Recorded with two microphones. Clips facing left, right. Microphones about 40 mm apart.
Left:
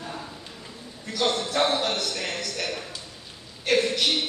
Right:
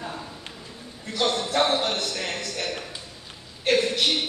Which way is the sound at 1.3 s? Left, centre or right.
Right.